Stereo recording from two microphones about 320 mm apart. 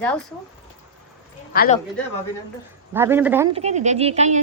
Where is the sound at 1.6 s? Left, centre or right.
Left.